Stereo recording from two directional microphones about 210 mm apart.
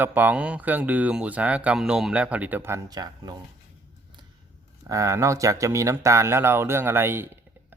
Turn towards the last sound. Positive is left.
turn(degrees=-10)  # may be behind; listen again after turning